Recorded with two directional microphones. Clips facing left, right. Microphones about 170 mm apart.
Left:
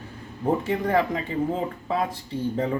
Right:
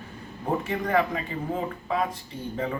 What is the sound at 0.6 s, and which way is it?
Speech, 30° left (ahead or behind).